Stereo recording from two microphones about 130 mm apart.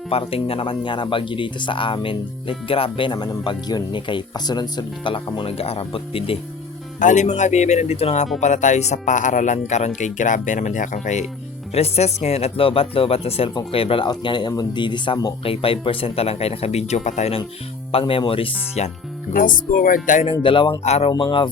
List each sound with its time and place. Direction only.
0.1 s speech: 50° left (ahead or behind)
7.0 s speech: 70° left (ahead or behind)
8.4 s speech: 70° left (ahead or behind)
11.7 s speech: 55° left (ahead or behind)
17.9 s speech: 40° left (ahead or behind)
18.8 s speech: 60° left (ahead or behind)
19.3 s speech: 90° left
20.4 s speech: 40° left (ahead or behind)
20.8 s speech: 55° left (ahead or behind)
21.1 s speech: 35° left (ahead or behind)